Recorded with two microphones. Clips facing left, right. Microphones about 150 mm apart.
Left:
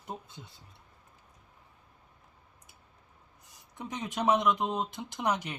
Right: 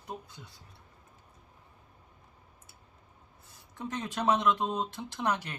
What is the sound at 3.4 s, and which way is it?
Speech, 15° left (ahead or behind).